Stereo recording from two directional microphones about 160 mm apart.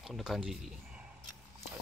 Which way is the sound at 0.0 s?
Centre (ahead or behind).